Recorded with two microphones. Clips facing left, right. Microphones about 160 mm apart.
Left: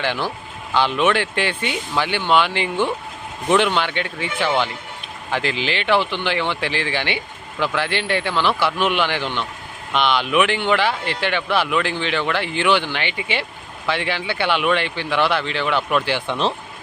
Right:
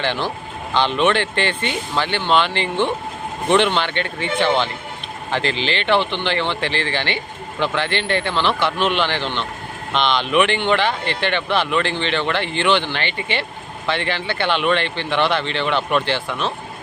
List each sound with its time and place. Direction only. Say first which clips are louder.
0.0 s speech: right 1 dB; 10° left (ahead or behind)
16.2 s speech: left 3 dB; 30° left (ahead or behind)